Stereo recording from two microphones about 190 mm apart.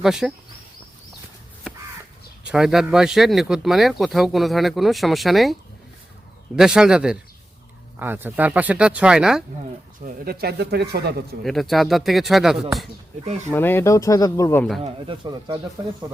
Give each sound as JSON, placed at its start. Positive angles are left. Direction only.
{"t": 0.0, "sound": "speech", "side_deg": 0}
{"t": 2.4, "sound": "speech", "side_deg": -5}
{"t": 6.6, "sound": "speech", "side_deg": -5}
{"t": 10.0, "sound": "speech", "side_deg": -55}
{"t": 11.4, "sound": "speech", "side_deg": 0}
{"t": 13.5, "sound": "speech", "side_deg": 10}
{"t": 14.8, "sound": "speech", "side_deg": -25}